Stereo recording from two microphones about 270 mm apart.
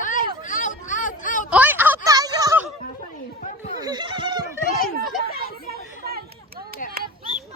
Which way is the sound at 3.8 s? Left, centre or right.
Centre.